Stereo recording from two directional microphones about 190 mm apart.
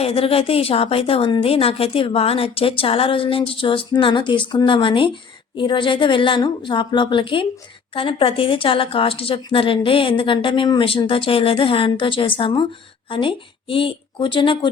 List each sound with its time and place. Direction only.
0.0 s a woman's voice: 30° left (ahead or behind)